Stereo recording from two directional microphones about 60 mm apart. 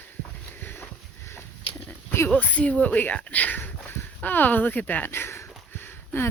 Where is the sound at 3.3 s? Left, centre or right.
Left.